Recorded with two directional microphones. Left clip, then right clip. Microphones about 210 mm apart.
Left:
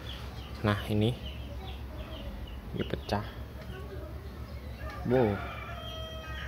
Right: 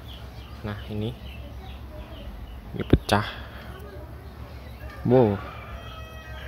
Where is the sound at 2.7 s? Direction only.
20° right (ahead or behind).